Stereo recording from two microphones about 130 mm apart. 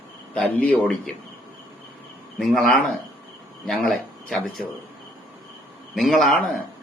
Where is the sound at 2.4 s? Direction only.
5° left (ahead or behind).